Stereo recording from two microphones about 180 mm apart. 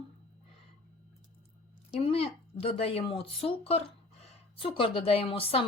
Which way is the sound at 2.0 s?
35° left (ahead or behind).